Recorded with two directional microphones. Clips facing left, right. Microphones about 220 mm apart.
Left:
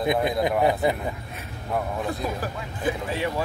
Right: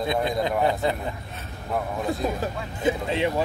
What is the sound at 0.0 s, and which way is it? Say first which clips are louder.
Speech: left 2 dB; 15° left (ahead or behind).